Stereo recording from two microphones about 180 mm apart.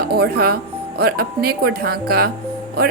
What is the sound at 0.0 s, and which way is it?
A woman's voice, 60° right (ahead or behind).